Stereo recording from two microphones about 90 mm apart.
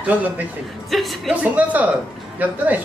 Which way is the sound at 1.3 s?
15° right (ahead or behind).